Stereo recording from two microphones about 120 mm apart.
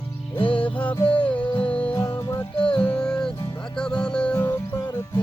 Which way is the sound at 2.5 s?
45° left (ahead or behind).